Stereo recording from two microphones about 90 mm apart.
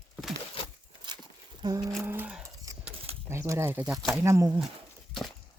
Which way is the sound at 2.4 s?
40° right (ahead or behind).